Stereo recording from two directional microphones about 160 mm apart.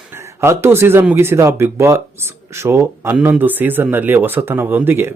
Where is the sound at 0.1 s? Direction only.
15° right (ahead or behind).